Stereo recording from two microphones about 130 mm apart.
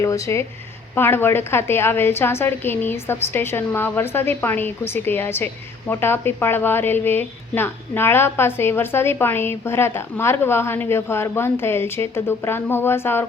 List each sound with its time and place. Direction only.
0.0 s a woman's voice: 25° left (ahead or behind)